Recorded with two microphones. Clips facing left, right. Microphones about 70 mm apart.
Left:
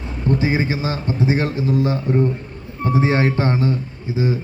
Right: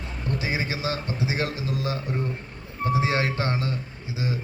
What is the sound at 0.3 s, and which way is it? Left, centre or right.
A man's voice, centre.